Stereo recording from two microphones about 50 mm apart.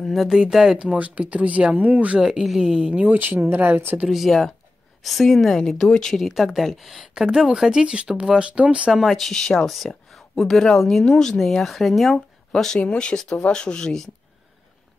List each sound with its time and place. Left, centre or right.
0.0 s a woman's voice: centre
0.7 s speech: right
2.1 s speech: centre
2.9 s speech: right
3.2 s speech: right
4.1 s a woman's voice: centre
6.1 s a woman's voice: centre
7.8 s speech: centre
8.9 s speech: centre
9.7 s a woman's voice: centre
12.8 s speech: centre